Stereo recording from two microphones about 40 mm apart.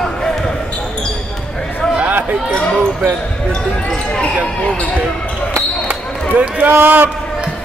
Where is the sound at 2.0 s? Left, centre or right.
Right.